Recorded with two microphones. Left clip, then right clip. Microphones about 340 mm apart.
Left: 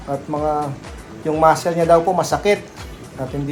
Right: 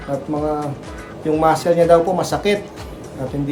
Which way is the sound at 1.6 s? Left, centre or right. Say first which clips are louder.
Right 2 dB; centre.